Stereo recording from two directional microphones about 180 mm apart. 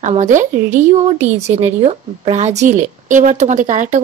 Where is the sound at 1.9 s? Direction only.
35° right (ahead or behind).